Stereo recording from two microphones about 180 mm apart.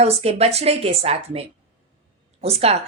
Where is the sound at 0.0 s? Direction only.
35° right (ahead or behind).